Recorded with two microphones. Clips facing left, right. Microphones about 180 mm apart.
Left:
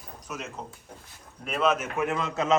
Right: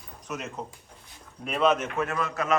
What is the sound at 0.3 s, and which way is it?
A man's voice, centre (ahead or behind).